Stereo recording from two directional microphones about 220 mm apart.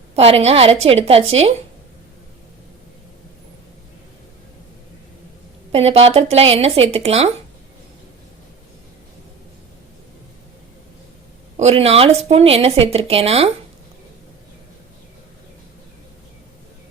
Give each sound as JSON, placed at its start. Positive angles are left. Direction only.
{"t": 0.2, "sound": "speech", "side_deg": -25}
{"t": 5.7, "sound": "speech", "side_deg": -30}
{"t": 11.5, "sound": "speech", "side_deg": -30}